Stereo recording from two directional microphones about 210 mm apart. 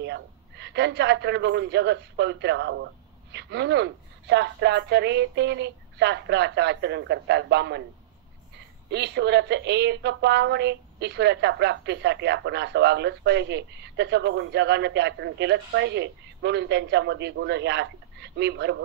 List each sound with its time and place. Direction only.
0.0 s a woman's voice: 55° right (ahead or behind)
8.9 s a woman's voice: 55° right (ahead or behind)